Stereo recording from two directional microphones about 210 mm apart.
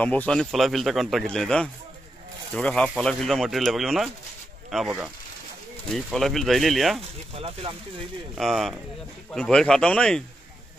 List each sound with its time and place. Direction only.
0.0 s a man's voice: 5° left (ahead or behind)
7.3 s speech: 25° right (ahead or behind)
8.4 s a man's voice: centre (ahead or behind)